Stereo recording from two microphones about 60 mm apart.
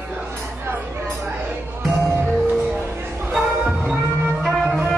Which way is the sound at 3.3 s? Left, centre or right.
Right.